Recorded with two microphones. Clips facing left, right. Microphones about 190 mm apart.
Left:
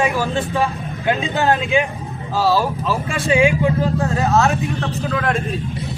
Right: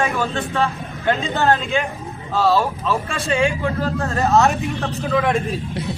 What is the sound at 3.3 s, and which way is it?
Speech, 15° left (ahead or behind).